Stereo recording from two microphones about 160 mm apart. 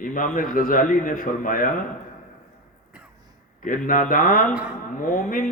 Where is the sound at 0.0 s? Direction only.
55° left (ahead or behind).